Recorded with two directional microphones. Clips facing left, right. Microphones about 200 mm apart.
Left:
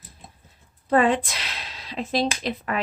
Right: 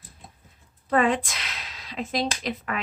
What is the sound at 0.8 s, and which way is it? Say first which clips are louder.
Speech: left 3 dB; 30° left (ahead or behind).